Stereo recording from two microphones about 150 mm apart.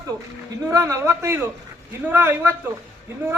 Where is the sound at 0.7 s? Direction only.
20° right (ahead or behind).